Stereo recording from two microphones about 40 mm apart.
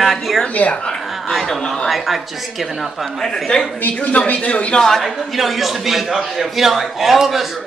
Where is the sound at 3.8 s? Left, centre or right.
Left.